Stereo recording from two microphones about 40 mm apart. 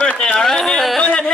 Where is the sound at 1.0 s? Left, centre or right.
Left.